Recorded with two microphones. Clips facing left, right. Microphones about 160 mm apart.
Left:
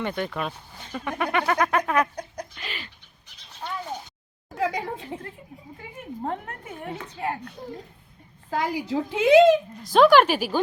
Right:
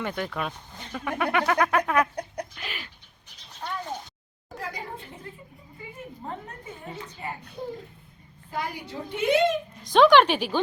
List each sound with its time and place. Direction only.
0.0 s speech: centre (ahead or behind)
4.5 s speech: 85° left
6.2 s a woman's voice: 70° left (ahead or behind)
8.4 s a woman's voice: 90° left
9.8 s speech: 5° left (ahead or behind)